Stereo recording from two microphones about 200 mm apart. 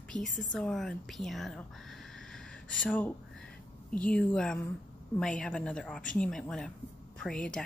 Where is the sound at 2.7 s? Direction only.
5° left (ahead or behind).